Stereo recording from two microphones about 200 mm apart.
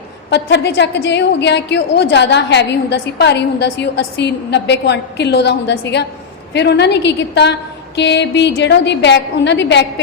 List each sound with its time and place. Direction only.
0.3 s a woman's voice: 60° left (ahead or behind)